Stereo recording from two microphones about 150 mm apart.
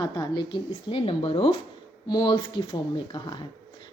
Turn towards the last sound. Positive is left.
turn(degrees=30)  # may be behind; listen again after turning